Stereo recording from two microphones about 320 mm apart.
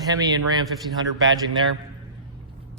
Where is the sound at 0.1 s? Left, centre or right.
Centre.